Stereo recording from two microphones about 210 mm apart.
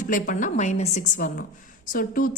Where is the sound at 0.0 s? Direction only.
40° left (ahead or behind).